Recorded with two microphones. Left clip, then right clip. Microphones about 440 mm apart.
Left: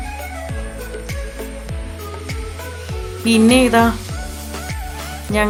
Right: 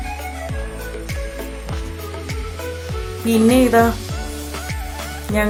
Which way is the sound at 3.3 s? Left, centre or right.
Right.